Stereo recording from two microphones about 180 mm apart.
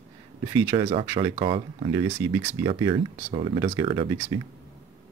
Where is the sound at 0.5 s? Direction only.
20° right (ahead or behind).